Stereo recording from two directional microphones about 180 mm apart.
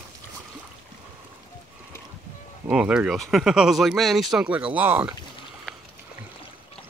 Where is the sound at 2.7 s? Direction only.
5° right (ahead or behind).